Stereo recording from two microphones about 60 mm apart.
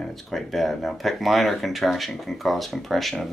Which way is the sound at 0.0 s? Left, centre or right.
Centre.